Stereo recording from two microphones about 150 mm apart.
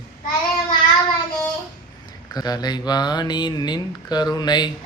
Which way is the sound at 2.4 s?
25° left (ahead or behind).